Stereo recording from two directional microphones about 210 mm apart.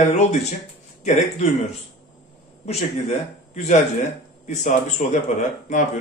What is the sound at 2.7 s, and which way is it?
Speech, 30° left (ahead or behind).